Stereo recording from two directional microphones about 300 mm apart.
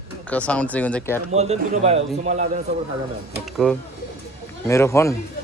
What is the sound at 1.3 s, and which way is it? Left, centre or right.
A man's voice, right.